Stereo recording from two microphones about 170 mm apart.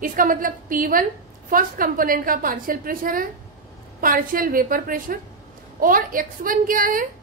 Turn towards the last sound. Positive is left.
turn(degrees=-55)  # may be behind; listen again after turning